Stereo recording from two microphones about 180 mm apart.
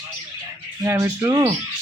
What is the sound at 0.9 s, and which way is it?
Speech, 15° right (ahead or behind).